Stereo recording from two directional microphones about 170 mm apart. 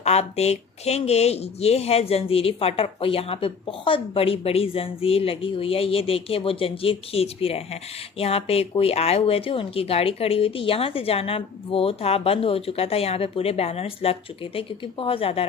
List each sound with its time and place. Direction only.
0.0 s speech: 40° left (ahead or behind)